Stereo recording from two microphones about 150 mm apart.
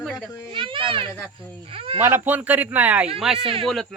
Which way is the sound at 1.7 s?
35° right (ahead or behind).